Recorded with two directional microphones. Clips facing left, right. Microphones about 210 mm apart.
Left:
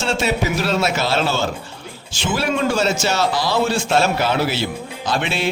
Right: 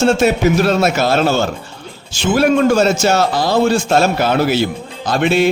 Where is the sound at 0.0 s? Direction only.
50° right (ahead or behind).